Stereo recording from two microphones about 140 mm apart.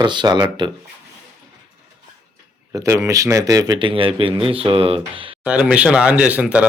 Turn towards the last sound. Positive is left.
turn(degrees=-10)  # may be behind; listen again after turning